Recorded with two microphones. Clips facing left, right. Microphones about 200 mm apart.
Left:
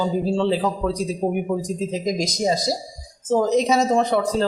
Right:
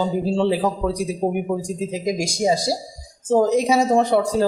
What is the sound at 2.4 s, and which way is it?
A man's voice, 10° right (ahead or behind).